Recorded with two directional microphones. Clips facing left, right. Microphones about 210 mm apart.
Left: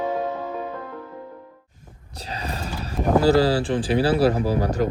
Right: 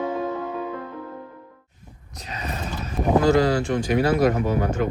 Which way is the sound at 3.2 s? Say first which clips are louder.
Left 1 dB; 35° left (ahead or behind).